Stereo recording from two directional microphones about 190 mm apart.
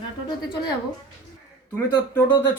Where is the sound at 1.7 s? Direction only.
15° left (ahead or behind).